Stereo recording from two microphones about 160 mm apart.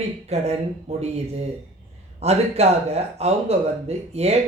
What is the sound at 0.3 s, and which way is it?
Speech, 40° right (ahead or behind).